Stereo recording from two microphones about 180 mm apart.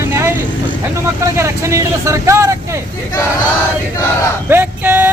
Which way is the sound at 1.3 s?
15° right (ahead or behind).